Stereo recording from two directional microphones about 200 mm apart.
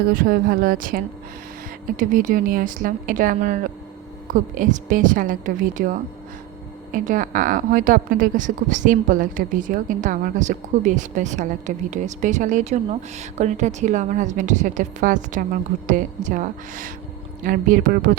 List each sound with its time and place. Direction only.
0.1 s a woman's voice: 45° right (ahead or behind)